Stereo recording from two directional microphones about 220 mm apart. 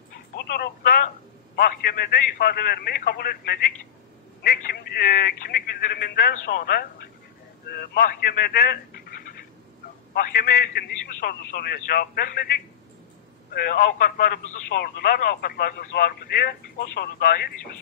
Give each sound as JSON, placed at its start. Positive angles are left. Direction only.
{"t": 0.4, "sound": "telephone", "side_deg": 45}
{"t": 1.6, "sound": "speech", "side_deg": 45}
{"t": 10.1, "sound": "speech", "side_deg": 45}
{"t": 13.5, "sound": "speech", "side_deg": 40}